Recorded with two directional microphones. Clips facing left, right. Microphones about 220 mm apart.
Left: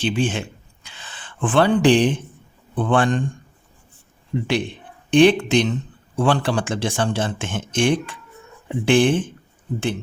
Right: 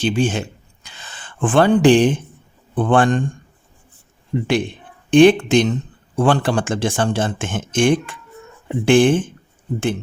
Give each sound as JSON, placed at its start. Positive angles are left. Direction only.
{"t": 0.0, "sound": "a sound", "side_deg": -45}
{"t": 2.7, "sound": "speech", "side_deg": -50}
{"t": 4.3, "sound": "speech", "side_deg": -55}